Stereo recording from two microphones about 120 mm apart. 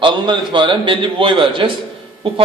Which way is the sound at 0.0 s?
40° right (ahead or behind).